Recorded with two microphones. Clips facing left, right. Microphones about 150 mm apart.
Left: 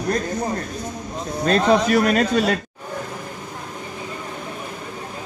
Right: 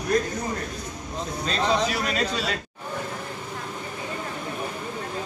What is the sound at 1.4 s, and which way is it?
A man's voice, 55° left (ahead or behind).